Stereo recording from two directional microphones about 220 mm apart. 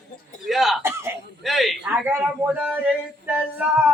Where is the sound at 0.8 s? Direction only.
10° right (ahead or behind).